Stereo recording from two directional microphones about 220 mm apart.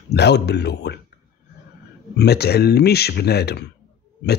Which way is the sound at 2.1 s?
45° left (ahead or behind).